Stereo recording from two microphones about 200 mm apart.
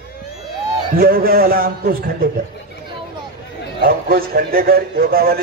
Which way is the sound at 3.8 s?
50° right (ahead or behind).